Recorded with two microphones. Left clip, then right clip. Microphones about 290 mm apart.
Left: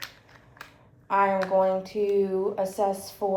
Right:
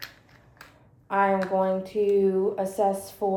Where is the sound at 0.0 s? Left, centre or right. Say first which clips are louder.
Left 1 dB; centre.